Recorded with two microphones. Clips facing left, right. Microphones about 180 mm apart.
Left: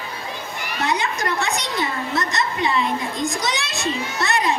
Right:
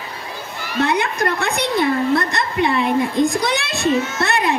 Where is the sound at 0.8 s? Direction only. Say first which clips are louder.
Right 2 dB; 55° right (ahead or behind).